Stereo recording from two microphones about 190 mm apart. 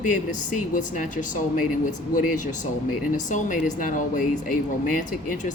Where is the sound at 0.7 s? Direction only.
40° left (ahead or behind).